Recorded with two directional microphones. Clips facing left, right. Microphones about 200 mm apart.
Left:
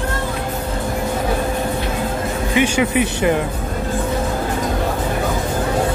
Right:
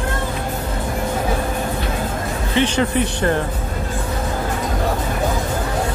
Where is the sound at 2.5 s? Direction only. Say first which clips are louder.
Left 1 dB; 10° left (ahead or behind).